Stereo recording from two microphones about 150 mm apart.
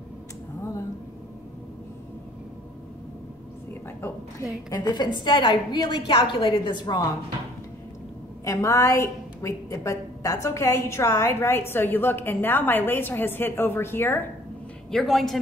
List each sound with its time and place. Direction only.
4.6 s a woman's voice: 30° left (ahead or behind)
8.5 s a woman's voice: 20° left (ahead or behind)
14.9 s a man's voice: centre (ahead or behind)